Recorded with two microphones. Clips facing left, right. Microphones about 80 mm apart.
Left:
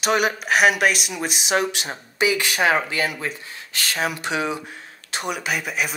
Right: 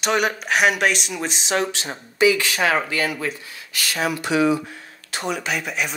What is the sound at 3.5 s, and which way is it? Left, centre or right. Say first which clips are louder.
Speech: even; left.